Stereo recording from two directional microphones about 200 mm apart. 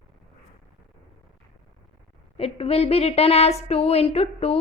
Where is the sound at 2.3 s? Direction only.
30° left (ahead or behind).